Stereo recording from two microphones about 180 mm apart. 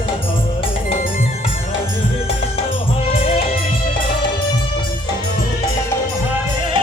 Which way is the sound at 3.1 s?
35° left (ahead or behind).